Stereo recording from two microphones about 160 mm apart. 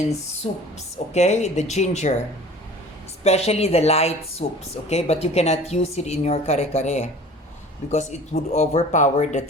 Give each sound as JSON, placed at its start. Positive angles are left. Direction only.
{"t": 1.1, "sound": "speech", "side_deg": 45}
{"t": 3.2, "sound": "speech", "side_deg": 40}